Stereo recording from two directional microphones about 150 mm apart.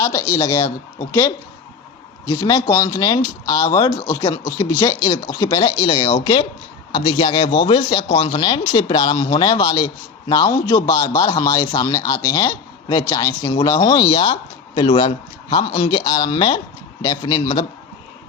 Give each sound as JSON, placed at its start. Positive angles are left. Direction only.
{"t": 0.0, "sound": "speech", "side_deg": 20}